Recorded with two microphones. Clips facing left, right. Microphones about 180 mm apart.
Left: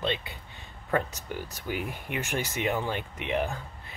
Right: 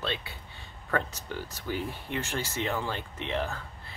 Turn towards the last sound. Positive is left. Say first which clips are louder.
# left 2 dB
turn(degrees=15)  # may be behind; listen again after turning